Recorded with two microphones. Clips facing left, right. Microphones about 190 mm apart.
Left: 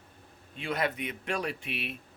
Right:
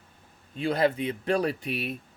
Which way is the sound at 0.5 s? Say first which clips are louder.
Right 7 dB; 35° right (ahead or behind).